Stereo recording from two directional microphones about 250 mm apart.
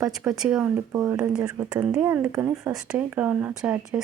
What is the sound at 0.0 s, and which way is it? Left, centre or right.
Speech, centre.